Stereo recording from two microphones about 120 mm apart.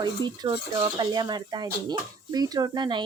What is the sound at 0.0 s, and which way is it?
Speech, 35° right (ahead or behind).